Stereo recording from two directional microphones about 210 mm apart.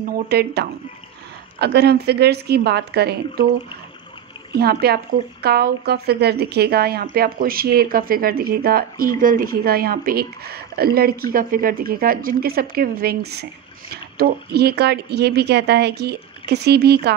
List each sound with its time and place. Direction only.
0.0 s speech: 50° right (ahead or behind)
4.5 s speech: 50° right (ahead or behind)